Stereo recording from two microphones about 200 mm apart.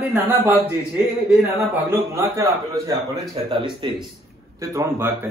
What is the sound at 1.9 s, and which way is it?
Speech, 10° right (ahead or behind).